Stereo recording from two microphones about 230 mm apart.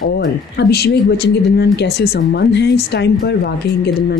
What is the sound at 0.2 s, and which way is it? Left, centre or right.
Speech, left.